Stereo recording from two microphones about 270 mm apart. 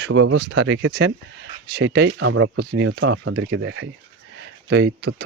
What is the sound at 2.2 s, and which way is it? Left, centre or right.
Speech, right.